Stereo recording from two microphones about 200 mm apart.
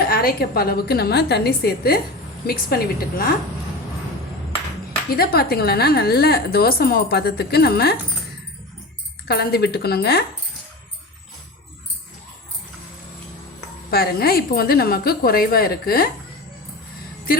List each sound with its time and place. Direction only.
0.0 s a woman's voice: 50° left (ahead or behind)
5.1 s a woman's voice: 50° left (ahead or behind)
9.2 s a woman's voice: 55° left (ahead or behind)
13.9 s a woman's voice: 50° left (ahead or behind)